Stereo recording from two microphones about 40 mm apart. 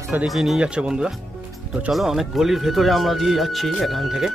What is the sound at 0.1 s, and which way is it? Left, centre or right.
Speech, right.